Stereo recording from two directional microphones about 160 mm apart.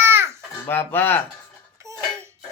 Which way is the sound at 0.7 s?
15° left (ahead or behind).